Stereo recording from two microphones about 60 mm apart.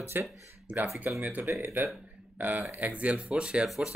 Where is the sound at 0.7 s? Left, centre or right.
Right.